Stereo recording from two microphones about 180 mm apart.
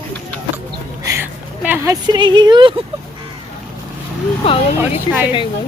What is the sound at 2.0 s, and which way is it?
Speech, 25° right (ahead or behind).